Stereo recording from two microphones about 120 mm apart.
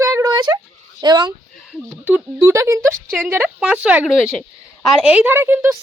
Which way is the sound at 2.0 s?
15° right (ahead or behind).